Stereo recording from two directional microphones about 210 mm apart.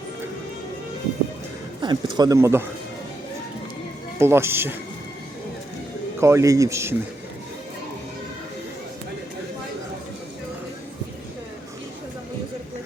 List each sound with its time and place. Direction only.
1.8 s speech: 20° right (ahead or behind)
4.2 s a man's voice: 10° right (ahead or behind)
6.1 s a man's voice: 15° right (ahead or behind)